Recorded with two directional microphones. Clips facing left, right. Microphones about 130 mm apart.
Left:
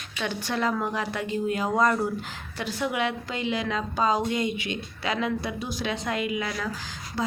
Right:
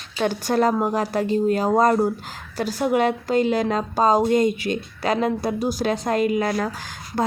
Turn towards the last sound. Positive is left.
turn(degrees=-45)  # may be behind; listen again after turning